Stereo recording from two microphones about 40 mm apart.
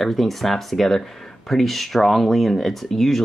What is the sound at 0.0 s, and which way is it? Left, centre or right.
Speech, centre.